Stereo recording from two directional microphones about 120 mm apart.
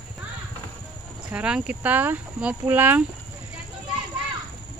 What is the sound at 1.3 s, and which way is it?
Speech, 10° right (ahead or behind).